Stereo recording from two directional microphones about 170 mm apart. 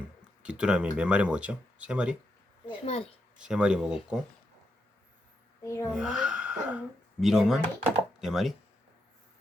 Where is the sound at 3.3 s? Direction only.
5° right (ahead or behind).